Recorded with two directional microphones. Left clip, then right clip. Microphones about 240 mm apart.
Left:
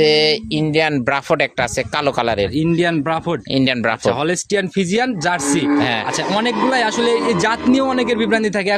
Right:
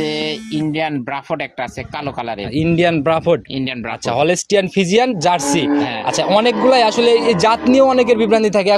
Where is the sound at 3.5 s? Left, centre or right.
Left.